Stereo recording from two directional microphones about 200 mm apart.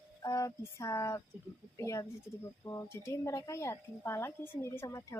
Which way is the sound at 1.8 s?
15° left (ahead or behind).